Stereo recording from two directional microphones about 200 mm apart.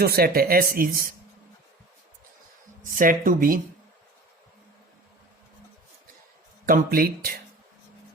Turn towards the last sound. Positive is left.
turn(degrees=-50)  # may be behind; listen again after turning